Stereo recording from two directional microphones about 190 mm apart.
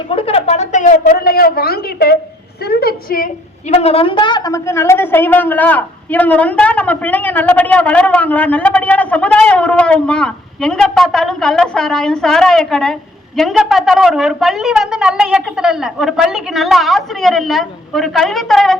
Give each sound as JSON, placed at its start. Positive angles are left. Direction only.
{"t": 0.1, "sound": "a woman's voice", "side_deg": 30}
{"t": 3.7, "sound": "a woman's voice", "side_deg": 30}